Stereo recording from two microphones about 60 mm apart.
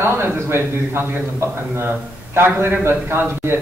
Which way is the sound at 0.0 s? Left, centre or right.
Right.